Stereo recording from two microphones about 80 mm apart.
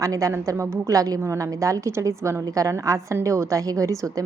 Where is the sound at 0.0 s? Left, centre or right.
Right.